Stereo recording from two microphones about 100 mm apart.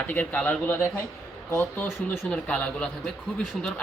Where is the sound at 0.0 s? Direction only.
15° left (ahead or behind).